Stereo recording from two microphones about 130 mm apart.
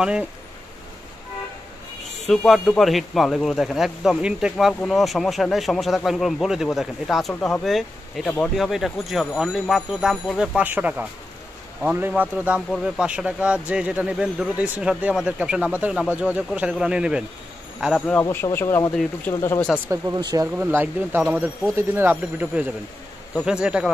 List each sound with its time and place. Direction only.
2.2 s a man's voice: centre (ahead or behind)
18.2 s a man's voice: 15° left (ahead or behind)
19.9 s speech: 30° right (ahead or behind)
20.5 s speech: 15° right (ahead or behind)
21.7 s speech: 20° right (ahead or behind)